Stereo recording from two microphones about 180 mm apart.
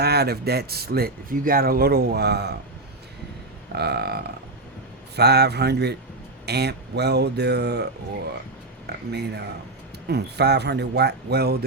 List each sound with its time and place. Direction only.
0.0 s speech: 65° right (ahead or behind)
3.8 s speech: 65° right (ahead or behind)
9.1 s speech: 65° right (ahead or behind)